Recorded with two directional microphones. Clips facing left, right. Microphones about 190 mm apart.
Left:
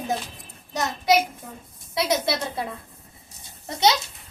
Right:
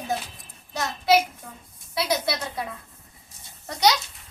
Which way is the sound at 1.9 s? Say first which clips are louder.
Left 2 dB; 20° left (ahead or behind).